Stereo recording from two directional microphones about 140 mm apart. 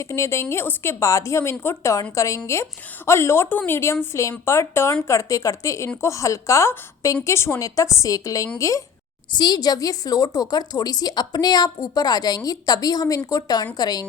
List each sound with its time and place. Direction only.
0.0 s a woman's voice: 20° left (ahead or behind)